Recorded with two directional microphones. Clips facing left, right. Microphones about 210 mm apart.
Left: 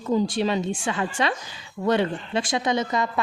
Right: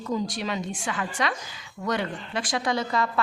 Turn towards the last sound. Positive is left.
turn(degrees=20)  # may be behind; listen again after turning